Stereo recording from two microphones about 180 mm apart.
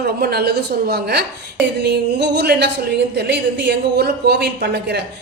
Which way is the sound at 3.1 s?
65° right (ahead or behind).